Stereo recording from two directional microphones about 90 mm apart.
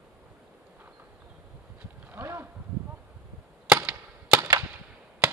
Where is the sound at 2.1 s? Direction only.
25° right (ahead or behind).